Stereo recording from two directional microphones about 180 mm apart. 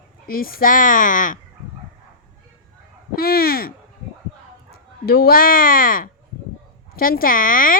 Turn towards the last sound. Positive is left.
turn(degrees=50)  # may be behind; listen again after turning